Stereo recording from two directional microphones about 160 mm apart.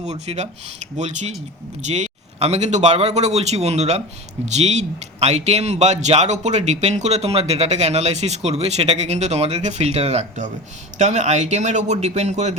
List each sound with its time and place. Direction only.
0.0 s speech: 45° right (ahead or behind)